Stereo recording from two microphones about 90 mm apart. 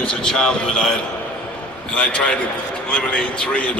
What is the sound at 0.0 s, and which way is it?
A man's voice, 10° left (ahead or behind).